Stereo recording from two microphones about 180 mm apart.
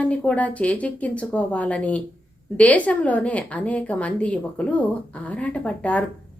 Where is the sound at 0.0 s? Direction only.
5° left (ahead or behind).